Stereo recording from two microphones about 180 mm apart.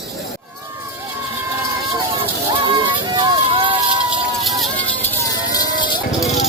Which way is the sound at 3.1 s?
25° right (ahead or behind).